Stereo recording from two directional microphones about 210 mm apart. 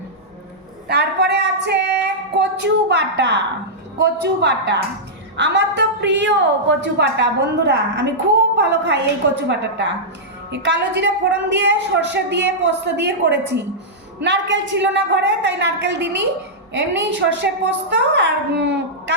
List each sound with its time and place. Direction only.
0.9 s a woman's voice: 50° right (ahead or behind)